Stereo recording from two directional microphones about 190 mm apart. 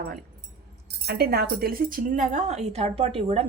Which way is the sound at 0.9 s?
60° right (ahead or behind).